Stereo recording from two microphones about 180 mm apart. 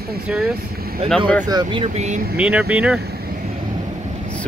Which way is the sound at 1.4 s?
25° right (ahead or behind).